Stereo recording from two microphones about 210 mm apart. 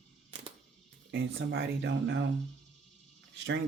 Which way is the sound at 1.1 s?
65° right (ahead or behind).